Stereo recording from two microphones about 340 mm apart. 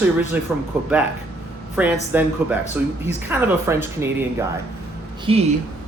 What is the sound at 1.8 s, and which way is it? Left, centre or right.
Speech, centre.